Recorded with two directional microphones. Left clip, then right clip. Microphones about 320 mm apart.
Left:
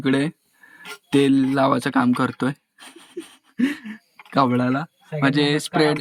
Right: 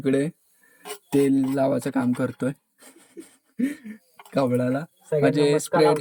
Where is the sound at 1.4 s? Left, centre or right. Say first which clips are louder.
Left 4 dB; centre.